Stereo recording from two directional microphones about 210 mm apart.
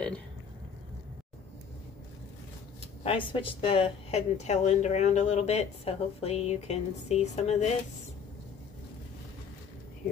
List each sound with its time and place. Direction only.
3.0 s a woman's voice: 25° left (ahead or behind)